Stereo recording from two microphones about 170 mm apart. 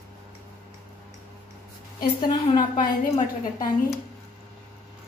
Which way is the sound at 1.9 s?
25° left (ahead or behind).